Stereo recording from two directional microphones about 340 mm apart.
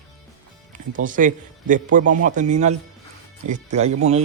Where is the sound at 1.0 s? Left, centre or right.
Right.